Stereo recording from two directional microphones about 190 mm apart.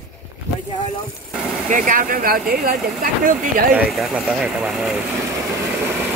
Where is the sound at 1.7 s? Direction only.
45° right (ahead or behind).